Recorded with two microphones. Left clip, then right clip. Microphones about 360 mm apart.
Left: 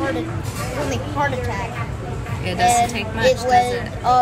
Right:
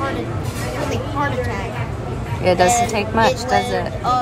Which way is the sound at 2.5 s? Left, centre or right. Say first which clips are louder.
Right 2 dB; centre.